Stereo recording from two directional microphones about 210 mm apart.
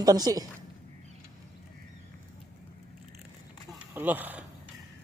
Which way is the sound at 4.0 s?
10° right (ahead or behind).